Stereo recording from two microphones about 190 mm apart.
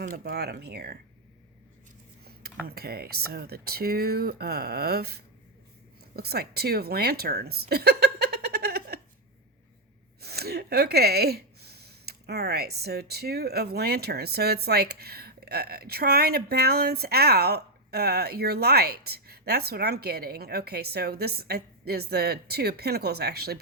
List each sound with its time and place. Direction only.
0.0 s speech: 50° right (ahead or behind)
2.2 s a woman's voice: 55° right (ahead or behind)
10.2 s speech: 55° right (ahead or behind)